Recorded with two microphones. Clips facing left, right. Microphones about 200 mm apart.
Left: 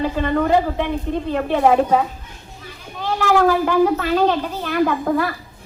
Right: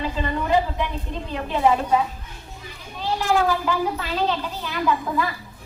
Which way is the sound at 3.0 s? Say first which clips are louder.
Left 5 dB; 55° left (ahead or behind).